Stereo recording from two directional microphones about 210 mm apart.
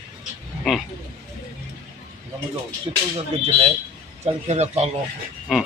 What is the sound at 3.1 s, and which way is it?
Speech, 25° right (ahead or behind).